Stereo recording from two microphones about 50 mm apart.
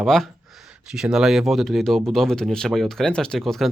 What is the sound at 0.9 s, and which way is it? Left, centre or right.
Speech, centre.